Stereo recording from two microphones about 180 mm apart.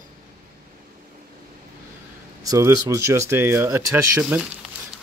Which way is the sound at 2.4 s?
15° right (ahead or behind).